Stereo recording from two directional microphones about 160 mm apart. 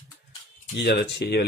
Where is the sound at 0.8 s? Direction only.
90° left.